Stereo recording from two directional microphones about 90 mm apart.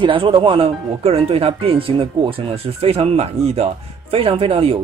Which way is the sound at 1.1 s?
90° right.